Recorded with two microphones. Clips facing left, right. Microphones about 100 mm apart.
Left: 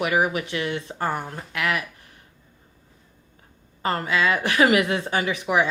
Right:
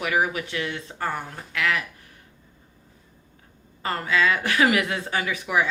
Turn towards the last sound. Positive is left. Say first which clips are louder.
# left 2 dB
turn(degrees=25)  # may be behind; listen again after turning